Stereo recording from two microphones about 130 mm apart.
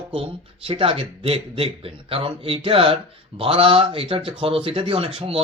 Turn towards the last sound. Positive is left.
turn(degrees=-45)  # may be behind; listen again after turning